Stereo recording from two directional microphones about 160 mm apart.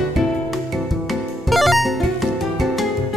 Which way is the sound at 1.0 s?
Centre (ahead or behind).